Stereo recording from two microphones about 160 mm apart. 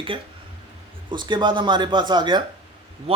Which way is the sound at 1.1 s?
30° right (ahead or behind).